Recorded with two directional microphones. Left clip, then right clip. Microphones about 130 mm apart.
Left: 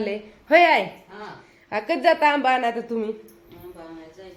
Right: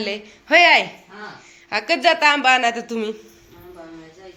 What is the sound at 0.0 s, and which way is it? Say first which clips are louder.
A woman's voice: right 2 dB; 20° left (ahead or behind).